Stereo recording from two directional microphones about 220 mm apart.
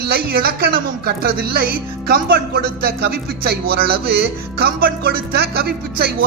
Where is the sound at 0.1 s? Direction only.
45° right (ahead or behind).